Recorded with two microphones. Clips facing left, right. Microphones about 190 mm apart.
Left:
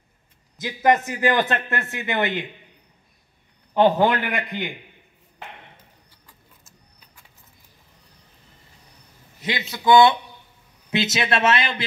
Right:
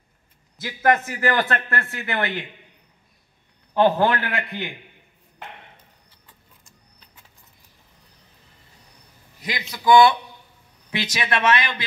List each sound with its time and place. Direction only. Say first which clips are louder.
0.6 s a man's voice: left 1 dB; 20° left (ahead or behind)
3.7 s a man's voice: left 1 dB; 15° left (ahead or behind)
9.4 s a man's voice: left 3 dB; 25° left (ahead or behind)